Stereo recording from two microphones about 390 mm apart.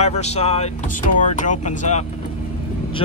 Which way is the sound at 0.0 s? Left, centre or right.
Centre.